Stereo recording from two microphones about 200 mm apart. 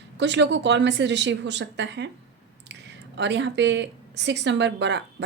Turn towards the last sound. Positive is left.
turn(degrees=-60)  # may be behind; listen again after turning